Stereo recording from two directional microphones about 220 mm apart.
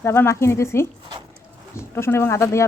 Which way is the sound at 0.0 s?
10° left (ahead or behind).